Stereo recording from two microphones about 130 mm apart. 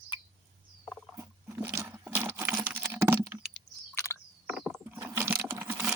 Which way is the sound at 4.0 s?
20° left (ahead or behind).